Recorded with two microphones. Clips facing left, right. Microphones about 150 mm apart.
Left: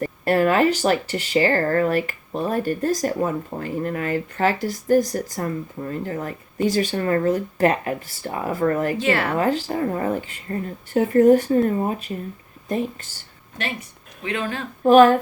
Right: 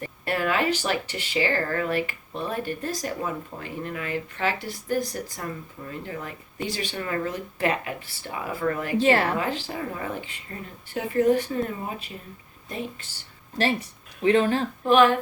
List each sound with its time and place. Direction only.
0.0 s speech: 45° left (ahead or behind)
9.0 s speech: 35° right (ahead or behind)
9.4 s speech: 45° left (ahead or behind)
13.6 s speech: 35° right (ahead or behind)
14.8 s speech: 40° left (ahead or behind)